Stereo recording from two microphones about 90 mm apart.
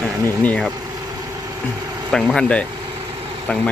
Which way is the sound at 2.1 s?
5° left (ahead or behind).